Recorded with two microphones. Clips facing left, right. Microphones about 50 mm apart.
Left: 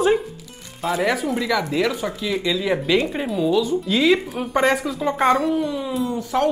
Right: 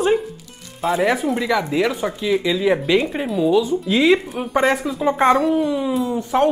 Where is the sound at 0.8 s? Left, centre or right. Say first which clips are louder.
Right 3 dB; centre.